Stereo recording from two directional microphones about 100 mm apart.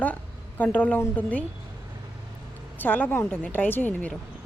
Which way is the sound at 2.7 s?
20° left (ahead or behind).